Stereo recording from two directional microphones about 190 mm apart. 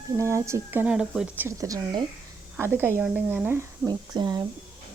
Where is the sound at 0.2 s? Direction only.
15° right (ahead or behind).